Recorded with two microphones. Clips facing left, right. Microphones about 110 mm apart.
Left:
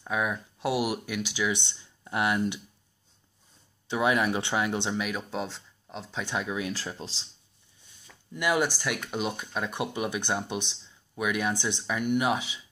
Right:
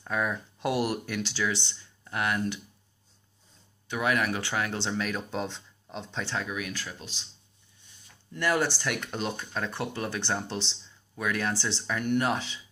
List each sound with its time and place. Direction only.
0.0 s speech: 5° left (ahead or behind)
3.8 s speech: 25° left (ahead or behind); by 6.2 s centre (ahead or behind)
6.2 s speech: 15° left (ahead or behind)
8.3 s speech: 10° left (ahead or behind)